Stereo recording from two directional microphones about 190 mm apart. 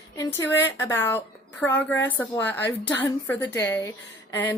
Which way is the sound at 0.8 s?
10° left (ahead or behind).